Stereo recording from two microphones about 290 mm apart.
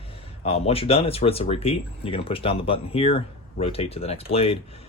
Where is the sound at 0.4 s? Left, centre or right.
Centre.